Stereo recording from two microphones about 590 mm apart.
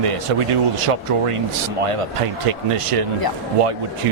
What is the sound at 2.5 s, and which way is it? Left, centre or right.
Speech, right.